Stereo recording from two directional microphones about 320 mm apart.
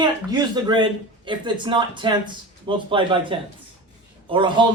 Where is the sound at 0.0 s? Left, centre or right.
Centre.